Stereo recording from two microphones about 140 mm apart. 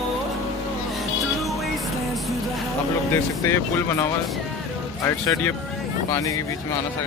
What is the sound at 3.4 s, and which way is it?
Speech, 20° left (ahead or behind).